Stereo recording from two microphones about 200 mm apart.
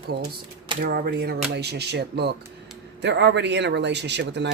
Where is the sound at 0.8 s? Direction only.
50° right (ahead or behind).